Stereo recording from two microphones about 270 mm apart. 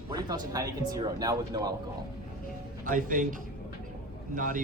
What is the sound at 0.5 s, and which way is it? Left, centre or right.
Speech, centre.